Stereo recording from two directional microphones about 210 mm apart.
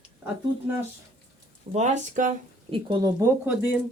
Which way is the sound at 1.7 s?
35° right (ahead or behind).